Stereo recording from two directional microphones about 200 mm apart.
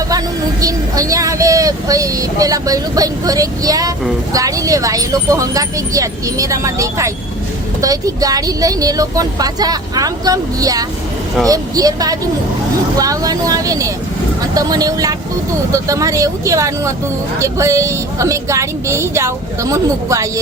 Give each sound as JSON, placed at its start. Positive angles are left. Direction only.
{"t": 1.1, "sound": "speech", "side_deg": -15}